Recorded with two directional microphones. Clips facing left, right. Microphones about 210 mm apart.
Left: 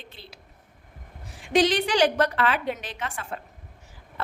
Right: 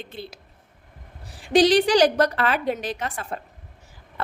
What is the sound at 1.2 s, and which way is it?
A woman's voice, 35° right (ahead or behind).